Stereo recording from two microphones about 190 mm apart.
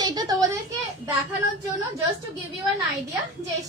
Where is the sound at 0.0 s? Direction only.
20° right (ahead or behind).